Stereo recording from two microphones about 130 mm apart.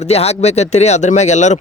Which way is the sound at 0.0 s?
55° left (ahead or behind).